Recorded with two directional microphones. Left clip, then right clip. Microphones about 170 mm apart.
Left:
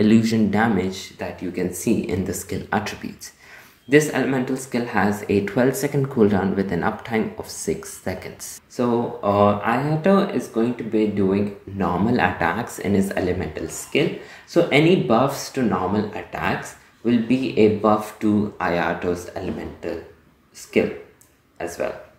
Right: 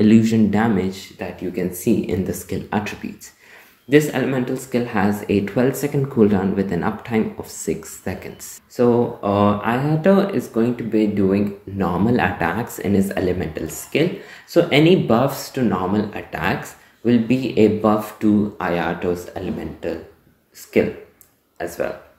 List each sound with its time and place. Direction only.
0.0 s speech: centre (ahead or behind)
3.9 s speech: 10° right (ahead or behind)
8.7 s speech: 20° right (ahead or behind)
20.7 s speech: 25° right (ahead or behind)